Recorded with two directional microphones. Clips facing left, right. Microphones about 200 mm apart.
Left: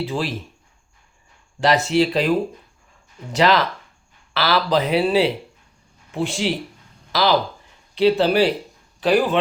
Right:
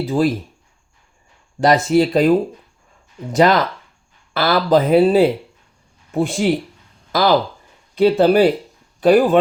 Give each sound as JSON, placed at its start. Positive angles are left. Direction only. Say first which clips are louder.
{"t": 0.0, "sound": "speech", "louder": "right 7 dB", "side_deg": -45}
{"t": 1.6, "sound": "speech", "louder": "right 4 dB", "side_deg": -45}
{"t": 3.3, "sound": "speech", "louder": "right 3 dB", "side_deg": -50}